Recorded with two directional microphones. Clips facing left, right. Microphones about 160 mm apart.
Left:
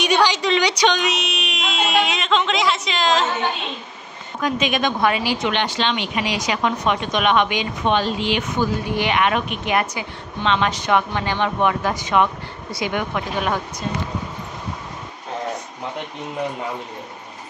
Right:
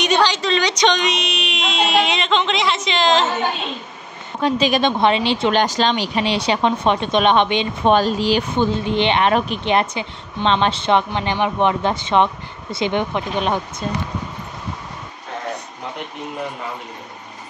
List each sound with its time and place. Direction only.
0.0 s a sound: 10° left (ahead or behind)
4.4 s speech: 30° right (ahead or behind)
5.5 s speech: 40° right (ahead or behind)
7.9 s speech: 40° right (ahead or behind); by 13.8 s 20° right (ahead or behind)